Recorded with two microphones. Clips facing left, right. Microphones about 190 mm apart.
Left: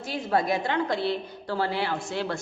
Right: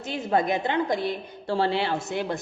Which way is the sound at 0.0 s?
20° right (ahead or behind).